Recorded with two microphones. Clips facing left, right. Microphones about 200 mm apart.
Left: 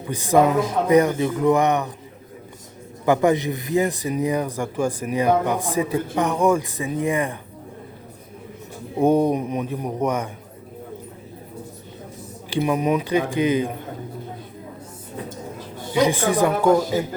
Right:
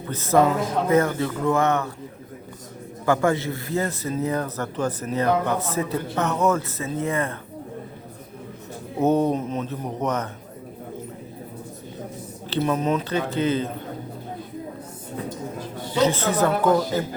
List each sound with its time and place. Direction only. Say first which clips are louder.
0.1 s a man's voice: left 2 dB; 15° left (ahead or behind)
3.1 s a man's voice: left 3 dB; 15° left (ahead or behind)
9.0 s a man's voice: left 2 dB; 10° left (ahead or behind)
12.5 s a man's voice: left 2 dB; 10° left (ahead or behind)
16.0 s a man's voice: left 2 dB; 15° left (ahead or behind)